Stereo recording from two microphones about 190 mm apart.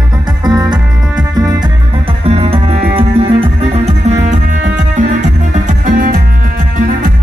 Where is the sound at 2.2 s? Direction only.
30° right (ahead or behind).